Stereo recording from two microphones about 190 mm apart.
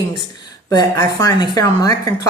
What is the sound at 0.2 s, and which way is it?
Speech, 20° left (ahead or behind).